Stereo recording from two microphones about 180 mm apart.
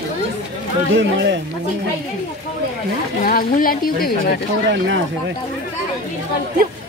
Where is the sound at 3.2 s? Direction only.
50° left (ahead or behind).